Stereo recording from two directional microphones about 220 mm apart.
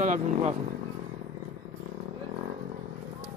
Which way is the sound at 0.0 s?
35° right (ahead or behind).